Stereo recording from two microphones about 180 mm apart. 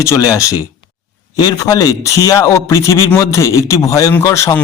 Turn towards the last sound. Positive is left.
turn(degrees=15)  # may be behind; listen again after turning